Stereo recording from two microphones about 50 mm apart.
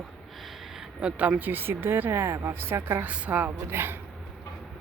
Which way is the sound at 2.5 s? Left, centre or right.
Right.